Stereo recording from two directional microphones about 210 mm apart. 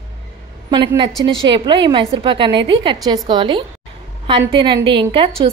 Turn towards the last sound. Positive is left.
turn(degrees=-25)  # may be behind; listen again after turning